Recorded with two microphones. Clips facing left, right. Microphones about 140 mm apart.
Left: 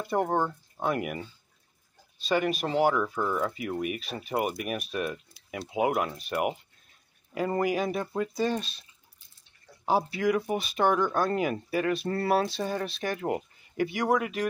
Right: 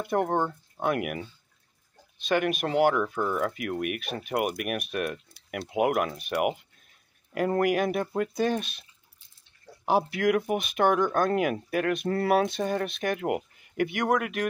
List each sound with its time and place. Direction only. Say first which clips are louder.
0.0 s speech: right 1 dB; centre (ahead or behind)
2.2 s speech: right 1 dB; centre (ahead or behind)
3.8 s speech: right 1 dB; 65° right (ahead or behind)
4.3 s speech: right 1 dB; 10° right (ahead or behind)
7.3 s speech: right 3 dB; 5° right (ahead or behind)
10.2 s speech: right 2 dB; 5° right (ahead or behind)